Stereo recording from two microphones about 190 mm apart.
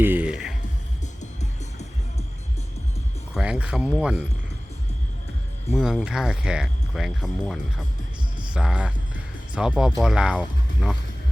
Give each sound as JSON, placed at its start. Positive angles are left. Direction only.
{"t": 0.0, "sound": "music", "side_deg": -10}
{"t": 1.0, "sound": "music", "side_deg": 40}
{"t": 3.3, "sound": "speech", "side_deg": -5}
{"t": 5.7, "sound": "speech", "side_deg": -5}